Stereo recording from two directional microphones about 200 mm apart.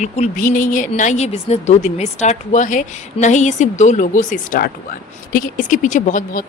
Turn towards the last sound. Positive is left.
turn(degrees=40)  # may be behind; listen again after turning